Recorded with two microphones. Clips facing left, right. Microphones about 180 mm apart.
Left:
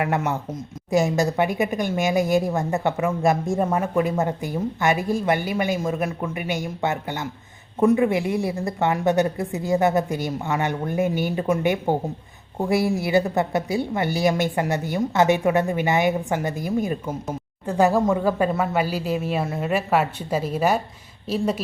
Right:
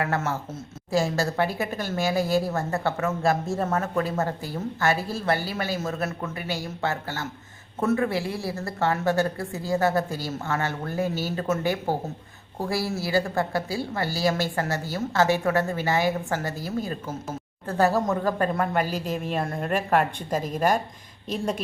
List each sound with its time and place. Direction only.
0.0 s speech: 15° left (ahead or behind)